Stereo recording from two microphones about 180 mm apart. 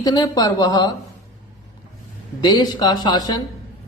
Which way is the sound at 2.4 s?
25° left (ahead or behind).